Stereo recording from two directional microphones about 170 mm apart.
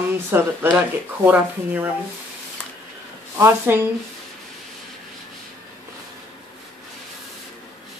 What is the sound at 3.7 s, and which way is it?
Speech, 10° right (ahead or behind).